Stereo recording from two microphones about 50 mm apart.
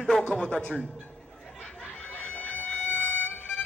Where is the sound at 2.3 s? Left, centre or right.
Left.